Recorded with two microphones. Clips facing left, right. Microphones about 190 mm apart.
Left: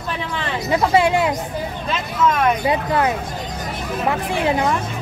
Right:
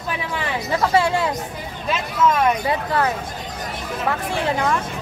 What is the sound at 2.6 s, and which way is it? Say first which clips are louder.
Speech: left 2 dB; 15° left (ahead or behind).